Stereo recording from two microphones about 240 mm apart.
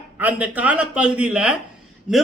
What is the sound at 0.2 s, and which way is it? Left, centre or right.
A man's voice, centre.